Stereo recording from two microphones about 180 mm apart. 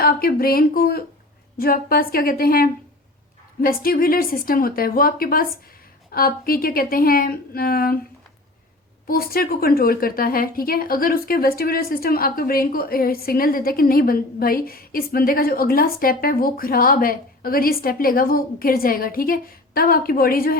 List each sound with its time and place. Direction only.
0.0 s a woman's voice: 55° left (ahead or behind)
9.0 s a woman's voice: 55° left (ahead or behind)